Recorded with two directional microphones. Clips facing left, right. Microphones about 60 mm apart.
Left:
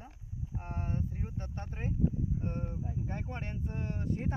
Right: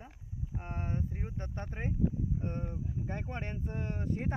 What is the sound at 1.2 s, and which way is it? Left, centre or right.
Speech, right.